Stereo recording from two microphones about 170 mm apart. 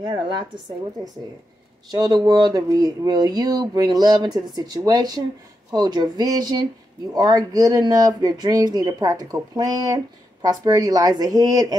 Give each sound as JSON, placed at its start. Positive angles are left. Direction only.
{"t": 0.0, "sound": "speech", "side_deg": -30}
{"t": 1.9, "sound": "speech", "side_deg": -25}